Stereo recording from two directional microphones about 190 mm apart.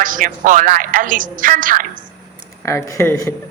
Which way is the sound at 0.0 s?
45° right (ahead or behind).